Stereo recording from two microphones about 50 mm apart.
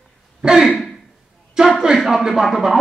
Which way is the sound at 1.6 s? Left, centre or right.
Centre.